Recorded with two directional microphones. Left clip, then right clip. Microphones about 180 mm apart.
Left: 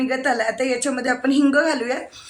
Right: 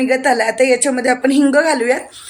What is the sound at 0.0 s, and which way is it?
A woman's voice, 15° right (ahead or behind).